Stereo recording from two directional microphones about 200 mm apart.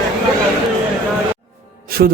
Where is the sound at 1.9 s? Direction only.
50° right (ahead or behind).